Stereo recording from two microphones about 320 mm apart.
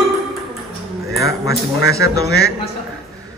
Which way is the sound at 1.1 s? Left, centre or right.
Centre.